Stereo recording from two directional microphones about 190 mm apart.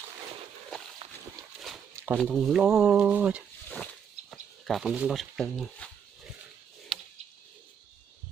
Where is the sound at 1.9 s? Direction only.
10° right (ahead or behind).